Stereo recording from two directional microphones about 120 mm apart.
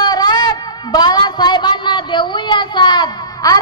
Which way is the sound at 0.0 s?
35° left (ahead or behind).